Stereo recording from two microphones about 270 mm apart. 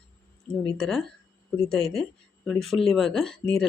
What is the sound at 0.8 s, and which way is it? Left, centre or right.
Speech, centre.